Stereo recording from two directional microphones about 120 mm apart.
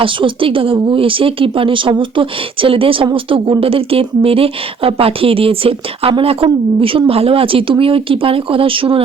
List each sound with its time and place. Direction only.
0.0 s speech: 45° right (ahead or behind)